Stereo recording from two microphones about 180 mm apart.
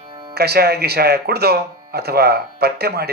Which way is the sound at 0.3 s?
60° right (ahead or behind).